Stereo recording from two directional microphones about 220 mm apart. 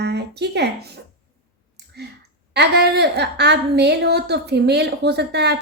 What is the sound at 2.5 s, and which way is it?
A woman's voice, 50° right (ahead or behind).